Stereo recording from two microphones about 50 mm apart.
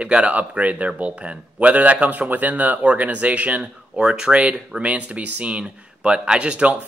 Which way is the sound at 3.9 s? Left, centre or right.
Centre.